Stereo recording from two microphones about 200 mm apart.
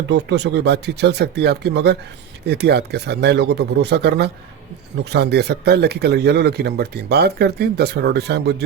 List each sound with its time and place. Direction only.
0.1 s speech: 60° right (ahead or behind)